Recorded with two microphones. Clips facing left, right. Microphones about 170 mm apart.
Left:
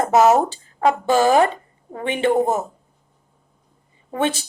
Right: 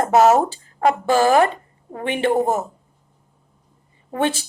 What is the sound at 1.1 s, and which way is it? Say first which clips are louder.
Speech: even; 20° left (ahead or behind).